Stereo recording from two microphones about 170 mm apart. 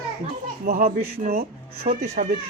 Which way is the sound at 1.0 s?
65° right (ahead or behind).